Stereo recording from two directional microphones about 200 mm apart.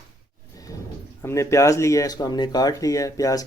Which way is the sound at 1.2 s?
15° left (ahead or behind).